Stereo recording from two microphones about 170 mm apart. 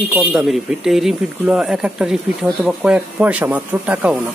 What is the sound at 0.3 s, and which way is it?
Speech, 5° right (ahead or behind).